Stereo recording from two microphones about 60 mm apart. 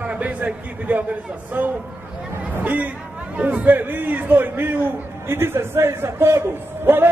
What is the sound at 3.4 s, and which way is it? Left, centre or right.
A man's voice, right.